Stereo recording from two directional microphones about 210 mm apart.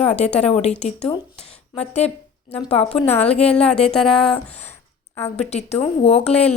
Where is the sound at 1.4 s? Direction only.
30° left (ahead or behind).